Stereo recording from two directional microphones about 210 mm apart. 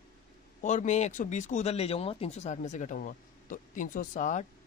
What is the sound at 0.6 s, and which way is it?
Speech, 35° left (ahead or behind).